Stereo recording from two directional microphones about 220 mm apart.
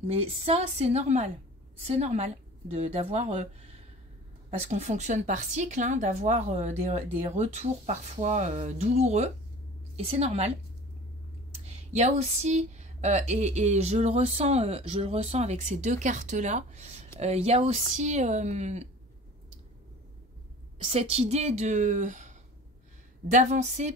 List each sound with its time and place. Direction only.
0.0 s speech: 25° right (ahead or behind)
11.6 s speech: 30° right (ahead or behind)
20.8 s speech: 25° right (ahead or behind)
23.3 s speech: 30° right (ahead or behind)